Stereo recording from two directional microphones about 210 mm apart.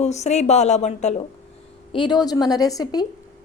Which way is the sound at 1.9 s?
20° left (ahead or behind).